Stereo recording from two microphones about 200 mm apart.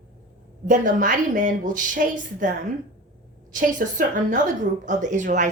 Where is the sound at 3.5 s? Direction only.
40° right (ahead or behind).